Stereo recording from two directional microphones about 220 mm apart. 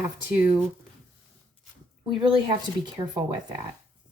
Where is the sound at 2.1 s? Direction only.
20° right (ahead or behind).